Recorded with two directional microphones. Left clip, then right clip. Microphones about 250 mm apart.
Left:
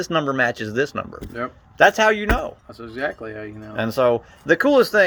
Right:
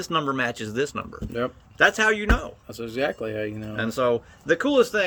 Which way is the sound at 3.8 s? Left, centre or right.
Centre.